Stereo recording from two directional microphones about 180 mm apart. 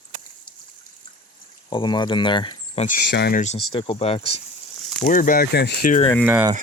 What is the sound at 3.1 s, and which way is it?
Speech, 65° left (ahead or behind).